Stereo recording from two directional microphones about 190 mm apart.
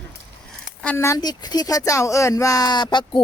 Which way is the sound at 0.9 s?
15° left (ahead or behind).